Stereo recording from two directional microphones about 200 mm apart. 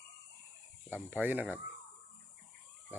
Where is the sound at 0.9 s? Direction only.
10° right (ahead or behind).